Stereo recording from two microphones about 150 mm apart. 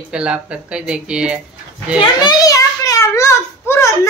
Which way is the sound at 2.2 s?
25° left (ahead or behind).